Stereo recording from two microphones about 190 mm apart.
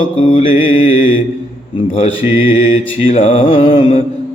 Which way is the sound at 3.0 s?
35° left (ahead or behind).